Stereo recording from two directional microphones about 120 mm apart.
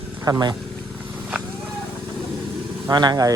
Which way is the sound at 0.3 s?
35° right (ahead or behind).